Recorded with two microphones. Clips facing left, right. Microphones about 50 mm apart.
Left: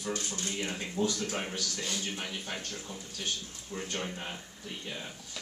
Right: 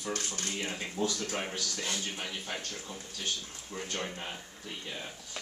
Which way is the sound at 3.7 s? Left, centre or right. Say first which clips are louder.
Left 1 dB; centre.